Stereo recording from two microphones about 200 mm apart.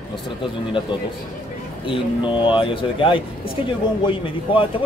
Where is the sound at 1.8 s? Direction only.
25° left (ahead or behind).